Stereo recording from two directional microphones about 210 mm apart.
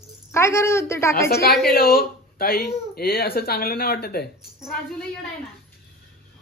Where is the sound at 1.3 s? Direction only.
50° left (ahead or behind).